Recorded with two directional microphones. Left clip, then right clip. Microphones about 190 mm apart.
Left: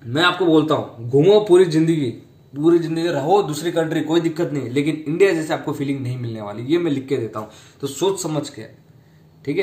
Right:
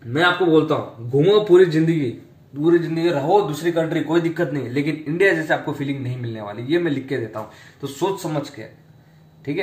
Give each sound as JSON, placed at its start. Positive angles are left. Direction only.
{"t": 0.5, "sound": "a man's voice", "side_deg": 25}
{"t": 1.1, "sound": "speech", "side_deg": 35}
{"t": 1.5, "sound": "a man's voice", "side_deg": 25}